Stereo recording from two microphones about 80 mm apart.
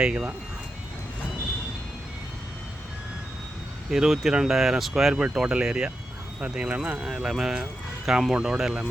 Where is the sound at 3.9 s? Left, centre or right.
Centre.